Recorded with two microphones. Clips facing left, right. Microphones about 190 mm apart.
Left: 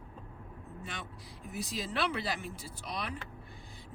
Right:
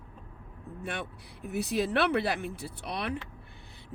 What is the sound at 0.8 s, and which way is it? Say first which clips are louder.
Speech: right 9 dB; 60° right (ahead or behind).